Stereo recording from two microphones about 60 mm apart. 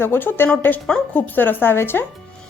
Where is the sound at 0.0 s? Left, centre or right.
Left.